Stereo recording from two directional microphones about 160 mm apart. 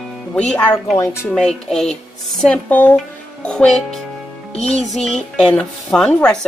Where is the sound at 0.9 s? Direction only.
20° left (ahead or behind).